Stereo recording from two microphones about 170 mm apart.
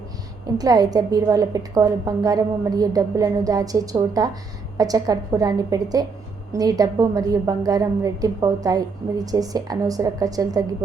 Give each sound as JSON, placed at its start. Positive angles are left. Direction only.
{"t": 0.4, "sound": "a woman's voice", "side_deg": -20}